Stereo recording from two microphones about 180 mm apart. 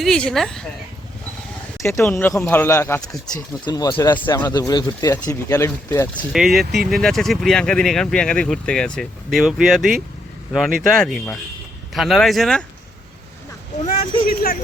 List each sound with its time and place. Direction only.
0.0 s speech: 5° left (ahead or behind)
1.8 s speech: 15° left (ahead or behind)
6.3 s speech: centre (ahead or behind)
14.3 s speech: 55° left (ahead or behind)